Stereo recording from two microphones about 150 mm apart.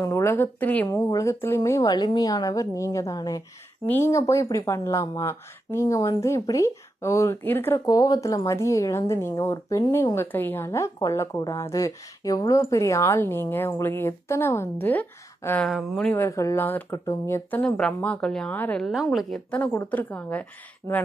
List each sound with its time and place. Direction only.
0.0 s a woman's voice: 15° left (ahead or behind); by 16.2 s centre (ahead or behind)
16.2 s speech: 20° left (ahead or behind)
18.9 s a woman's voice: centre (ahead or behind)